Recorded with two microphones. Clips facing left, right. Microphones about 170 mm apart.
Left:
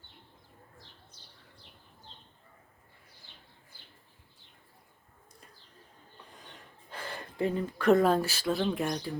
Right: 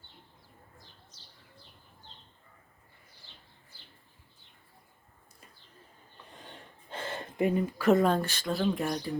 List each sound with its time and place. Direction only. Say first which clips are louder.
1.1 s bird: left 1 dB; 55° left (ahead or behind)
6.9 s a sound: right 3 dB; 25° right (ahead or behind)
7.8 s speech: left 2 dB; centre (ahead or behind)